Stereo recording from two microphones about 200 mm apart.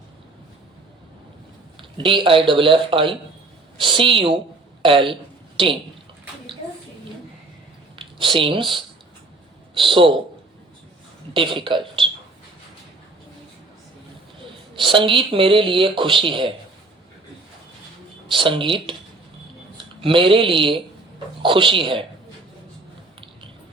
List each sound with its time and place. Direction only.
2.0 s a woman's voice: 25° right (ahead or behind)
7.9 s a sound: 25° right (ahead or behind)
9.7 s speech: 25° right (ahead or behind)
11.3 s speech: 25° right (ahead or behind)
14.8 s speech: 25° right (ahead or behind)
18.3 s speech: 25° right (ahead or behind)
20.0 s speech: 25° right (ahead or behind)